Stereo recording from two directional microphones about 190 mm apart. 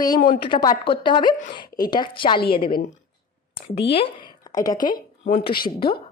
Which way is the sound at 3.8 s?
30° left (ahead or behind).